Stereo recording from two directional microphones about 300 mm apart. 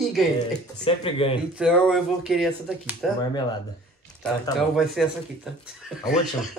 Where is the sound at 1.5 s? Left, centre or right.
Centre.